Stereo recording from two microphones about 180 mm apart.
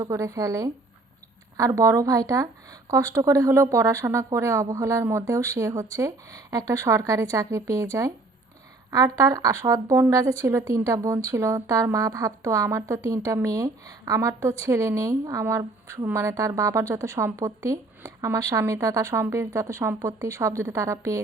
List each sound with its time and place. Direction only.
0.0 s a woman's voice: 15° right (ahead or behind)